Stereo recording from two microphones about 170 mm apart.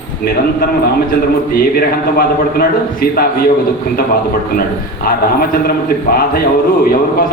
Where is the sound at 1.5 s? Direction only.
65° left (ahead or behind).